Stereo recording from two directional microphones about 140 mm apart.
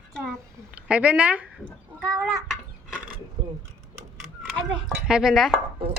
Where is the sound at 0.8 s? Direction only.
10° right (ahead or behind).